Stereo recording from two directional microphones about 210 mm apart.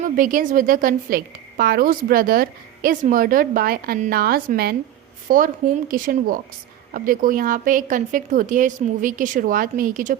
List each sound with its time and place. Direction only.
0.0 s a woman's voice: 40° right (ahead or behind)